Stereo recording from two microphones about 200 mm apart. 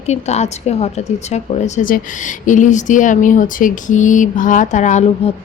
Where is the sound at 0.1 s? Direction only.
35° left (ahead or behind).